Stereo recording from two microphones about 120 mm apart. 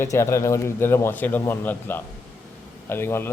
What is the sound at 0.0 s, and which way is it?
Speech, 25° left (ahead or behind).